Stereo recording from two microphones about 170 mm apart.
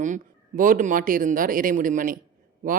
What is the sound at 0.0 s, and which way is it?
A man's voice, 50° right (ahead or behind).